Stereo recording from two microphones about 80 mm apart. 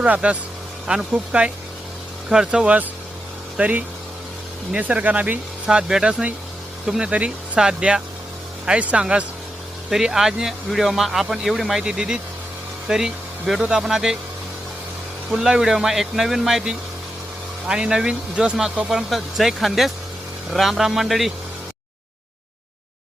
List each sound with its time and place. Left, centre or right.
0.0 s speech: centre
15.3 s speech: centre